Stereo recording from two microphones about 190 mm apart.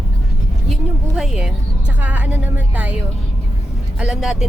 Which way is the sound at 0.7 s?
Centre (ahead or behind).